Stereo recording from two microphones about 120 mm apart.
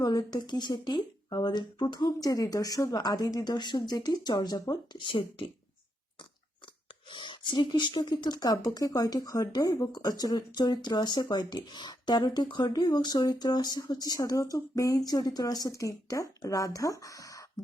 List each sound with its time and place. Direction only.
0.0 s speech: 30° left (ahead or behind)
7.1 s speech: 40° left (ahead or behind)